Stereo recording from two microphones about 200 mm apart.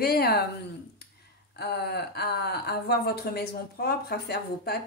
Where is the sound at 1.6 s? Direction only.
55° left (ahead or behind).